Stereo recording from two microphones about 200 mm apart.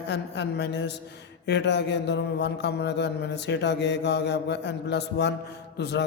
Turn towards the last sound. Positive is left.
turn(degrees=60)  # may be behind; listen again after turning